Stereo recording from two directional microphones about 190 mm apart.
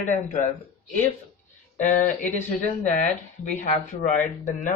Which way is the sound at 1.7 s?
45° left (ahead or behind).